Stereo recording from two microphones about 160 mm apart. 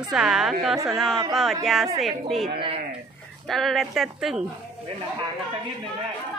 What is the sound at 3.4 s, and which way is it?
Speech, centre (ahead or behind).